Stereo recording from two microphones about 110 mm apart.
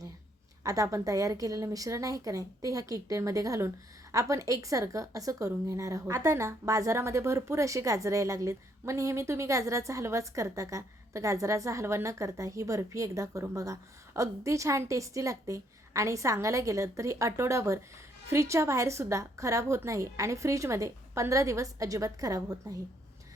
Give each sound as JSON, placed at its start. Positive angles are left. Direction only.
{"t": 0.6, "sound": "a woman's voice", "side_deg": -30}